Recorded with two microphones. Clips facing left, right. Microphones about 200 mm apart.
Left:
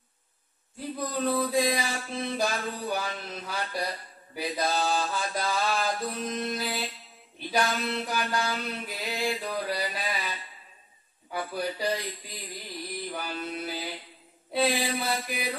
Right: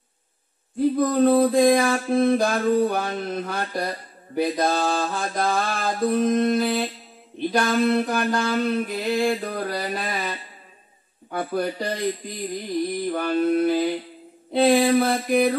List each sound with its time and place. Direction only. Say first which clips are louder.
0.7 s mantra: right 13 dB; 55° right (ahead or behind)
11.3 s mantra: right 7 dB; 55° right (ahead or behind)
13.1 s mantra: right 16 dB; 55° right (ahead or behind)